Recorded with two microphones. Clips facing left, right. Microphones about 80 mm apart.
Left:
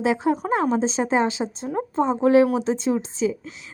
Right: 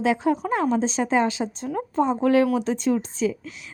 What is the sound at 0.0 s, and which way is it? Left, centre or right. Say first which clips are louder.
A woman's voice: even; left.